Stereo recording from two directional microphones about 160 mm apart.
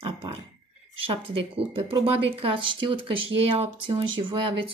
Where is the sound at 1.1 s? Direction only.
35° right (ahead or behind).